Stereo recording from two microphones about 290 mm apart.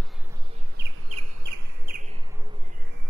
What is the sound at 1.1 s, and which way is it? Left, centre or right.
Bird, right.